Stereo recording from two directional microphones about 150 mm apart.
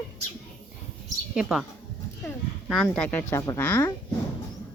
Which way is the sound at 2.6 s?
5° left (ahead or behind).